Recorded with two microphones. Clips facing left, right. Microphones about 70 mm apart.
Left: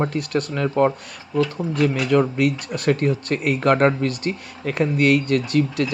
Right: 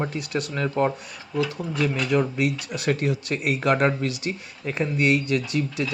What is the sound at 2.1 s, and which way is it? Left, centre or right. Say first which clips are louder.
Speech: left 4 dB; left.